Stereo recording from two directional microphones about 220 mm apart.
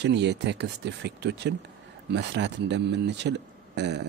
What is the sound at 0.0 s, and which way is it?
Speech, 50° right (ahead or behind).